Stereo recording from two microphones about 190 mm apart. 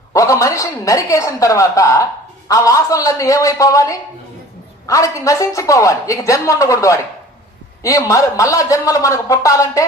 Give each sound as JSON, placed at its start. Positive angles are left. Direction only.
{"t": 0.1, "sound": "speech", "side_deg": 15}